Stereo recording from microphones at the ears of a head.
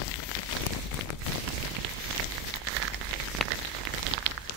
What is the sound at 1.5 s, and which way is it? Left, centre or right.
Rain on surface, right.